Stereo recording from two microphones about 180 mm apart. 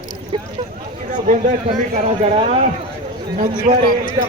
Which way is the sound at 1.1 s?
45° right (ahead or behind).